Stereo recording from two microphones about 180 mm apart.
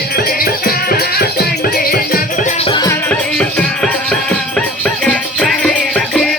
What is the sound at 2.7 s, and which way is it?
Music, 25° left (ahead or behind).